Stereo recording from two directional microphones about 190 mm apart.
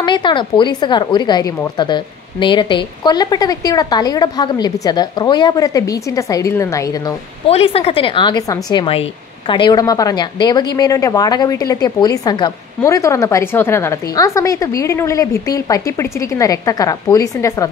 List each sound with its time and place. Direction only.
0.0 s a woman's voice: 25° left (ahead or behind)
7.4 s a woman's voice: 30° left (ahead or behind)